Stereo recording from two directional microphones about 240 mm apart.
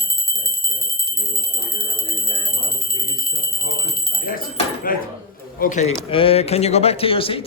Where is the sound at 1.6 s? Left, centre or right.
Left.